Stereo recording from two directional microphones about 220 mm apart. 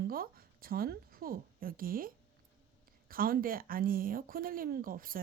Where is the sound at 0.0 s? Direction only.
40° right (ahead or behind).